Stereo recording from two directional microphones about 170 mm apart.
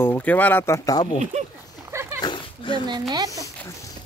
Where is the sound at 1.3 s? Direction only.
40° right (ahead or behind).